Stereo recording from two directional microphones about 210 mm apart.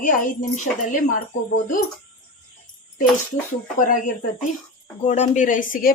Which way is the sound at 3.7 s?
40° left (ahead or behind).